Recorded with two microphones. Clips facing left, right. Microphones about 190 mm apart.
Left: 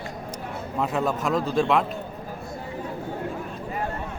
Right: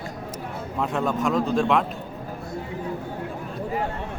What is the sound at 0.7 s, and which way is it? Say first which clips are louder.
Speech: even; centre (ahead or behind).